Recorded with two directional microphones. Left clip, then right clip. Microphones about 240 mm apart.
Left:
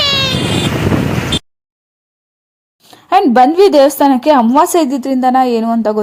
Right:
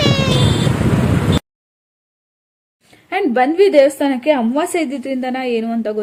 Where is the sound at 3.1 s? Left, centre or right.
Left.